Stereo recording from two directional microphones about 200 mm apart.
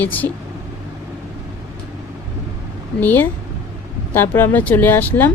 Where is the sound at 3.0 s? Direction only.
10° left (ahead or behind).